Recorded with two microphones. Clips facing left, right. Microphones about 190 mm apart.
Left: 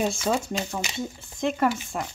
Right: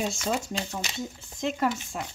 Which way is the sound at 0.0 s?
55° left (ahead or behind).